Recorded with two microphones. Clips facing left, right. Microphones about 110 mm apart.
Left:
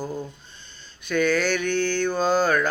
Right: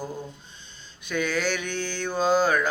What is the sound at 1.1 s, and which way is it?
Mantra, 15° right (ahead or behind).